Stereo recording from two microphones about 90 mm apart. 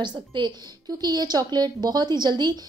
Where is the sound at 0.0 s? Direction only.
55° right (ahead or behind).